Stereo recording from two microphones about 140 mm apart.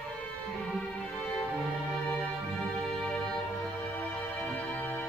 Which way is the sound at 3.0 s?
10° left (ahead or behind).